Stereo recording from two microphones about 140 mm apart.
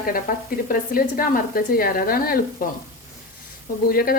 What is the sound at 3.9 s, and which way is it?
Speech, 90° left.